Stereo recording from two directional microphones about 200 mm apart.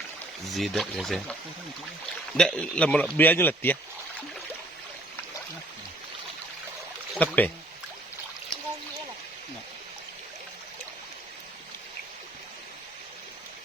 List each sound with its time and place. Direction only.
0.5 s speech: centre (ahead or behind)
7.1 s speech: 5° left (ahead or behind)